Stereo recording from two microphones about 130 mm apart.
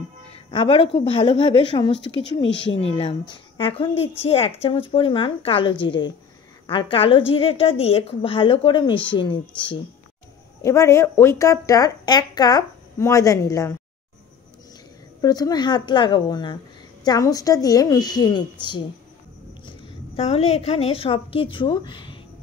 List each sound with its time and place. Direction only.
0.5 s a woman's voice: 40° left (ahead or behind)
10.6 s speech: 20° left (ahead or behind)
15.2 s a woman's voice: 30° left (ahead or behind)
20.2 s a woman's voice: 50° left (ahead or behind)